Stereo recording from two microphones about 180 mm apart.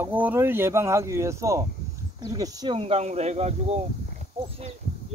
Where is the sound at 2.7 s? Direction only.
35° right (ahead or behind).